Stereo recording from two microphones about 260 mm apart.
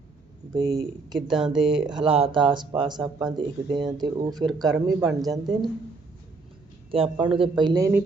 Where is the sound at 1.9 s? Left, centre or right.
Right.